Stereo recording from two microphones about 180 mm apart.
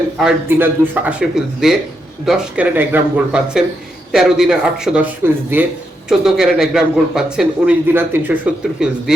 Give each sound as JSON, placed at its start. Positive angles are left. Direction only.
{"t": 0.2, "sound": "speech", "side_deg": -10}